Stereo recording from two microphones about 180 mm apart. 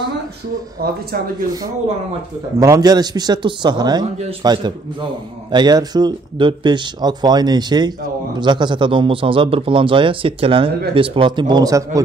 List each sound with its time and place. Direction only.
0.8 s speech: 55° right (ahead or behind)
2.6 s speech: 20° right (ahead or behind)